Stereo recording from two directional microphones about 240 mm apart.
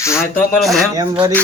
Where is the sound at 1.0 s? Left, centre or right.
Centre.